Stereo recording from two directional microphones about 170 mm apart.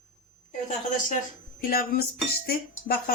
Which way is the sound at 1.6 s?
60° left (ahead or behind).